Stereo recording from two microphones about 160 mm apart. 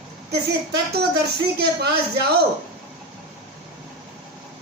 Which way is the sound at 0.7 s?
90° right.